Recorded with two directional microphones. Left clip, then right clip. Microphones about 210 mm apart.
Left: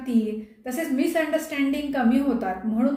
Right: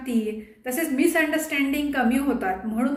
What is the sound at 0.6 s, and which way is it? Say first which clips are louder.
A woman's voice: right 3 dB; centre (ahead or behind).